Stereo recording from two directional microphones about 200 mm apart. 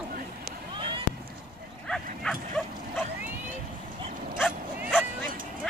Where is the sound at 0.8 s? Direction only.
25° right (ahead or behind).